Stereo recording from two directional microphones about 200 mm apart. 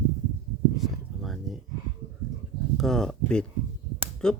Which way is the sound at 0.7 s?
Centre (ahead or behind).